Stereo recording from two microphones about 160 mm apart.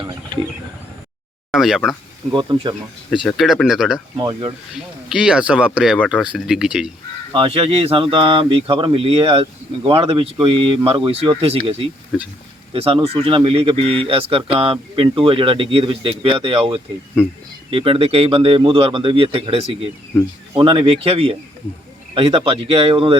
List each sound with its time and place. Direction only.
1.5 s speech: centre (ahead or behind)
2.3 s speech: 30° right (ahead or behind)
3.2 s speech: centre (ahead or behind)
4.2 s speech: 30° right (ahead or behind)
4.7 s speech: 5° right (ahead or behind)
7.3 s speech: 35° right (ahead or behind)
17.2 s speech: 5° right (ahead or behind)
17.7 s speech: 35° right (ahead or behind)